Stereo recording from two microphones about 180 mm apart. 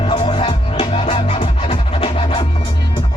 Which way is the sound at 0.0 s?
35° left (ahead or behind).